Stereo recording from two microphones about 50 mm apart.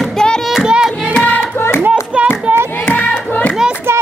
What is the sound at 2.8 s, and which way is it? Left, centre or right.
Music, left.